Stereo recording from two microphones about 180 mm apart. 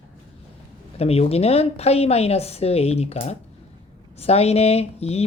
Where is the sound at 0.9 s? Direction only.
35° left (ahead or behind).